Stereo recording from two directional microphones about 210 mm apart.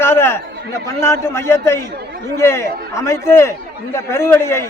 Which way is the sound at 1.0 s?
10° left (ahead or behind).